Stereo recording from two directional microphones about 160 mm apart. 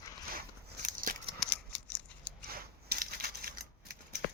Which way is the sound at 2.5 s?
70° right (ahead or behind).